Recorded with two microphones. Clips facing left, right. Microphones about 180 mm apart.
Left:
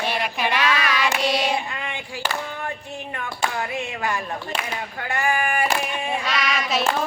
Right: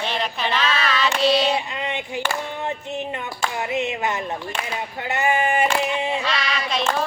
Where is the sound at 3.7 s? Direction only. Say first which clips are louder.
Right 3 dB; 20° right (ahead or behind).